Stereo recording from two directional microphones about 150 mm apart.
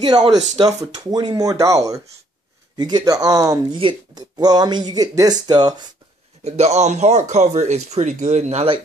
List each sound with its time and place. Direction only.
0.0 s speech: 25° right (ahead or behind)
6.4 s speech: 45° right (ahead or behind)